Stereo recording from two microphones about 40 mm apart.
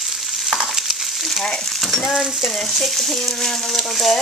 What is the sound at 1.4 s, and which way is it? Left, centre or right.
Speech, centre.